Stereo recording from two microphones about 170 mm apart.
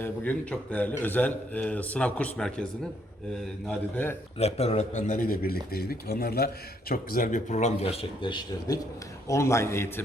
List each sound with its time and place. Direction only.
0.0 s a man's voice: 10° left (ahead or behind)
3.7 s a man's voice: 10° left (ahead or behind)
4.4 s a man's voice: 40° left (ahead or behind); by 10.0 s 15° left (ahead or behind)